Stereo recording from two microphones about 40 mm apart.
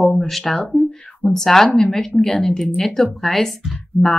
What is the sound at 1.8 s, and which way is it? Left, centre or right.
Speech, centre.